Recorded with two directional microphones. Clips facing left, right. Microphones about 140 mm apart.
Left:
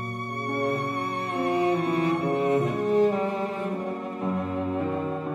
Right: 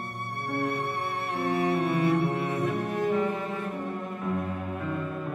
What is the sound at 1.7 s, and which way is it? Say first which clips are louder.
Music: left 1 dB; 30° left (ahead or behind).